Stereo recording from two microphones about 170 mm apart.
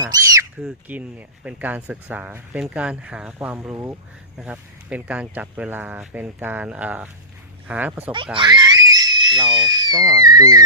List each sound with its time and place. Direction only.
0.0 s a sound: 20° right (ahead or behind)
0.6 s speech: 10° right (ahead or behind)
8.4 s speech: 25° right (ahead or behind)